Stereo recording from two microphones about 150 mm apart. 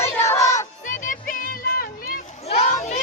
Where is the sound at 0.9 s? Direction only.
65° left (ahead or behind).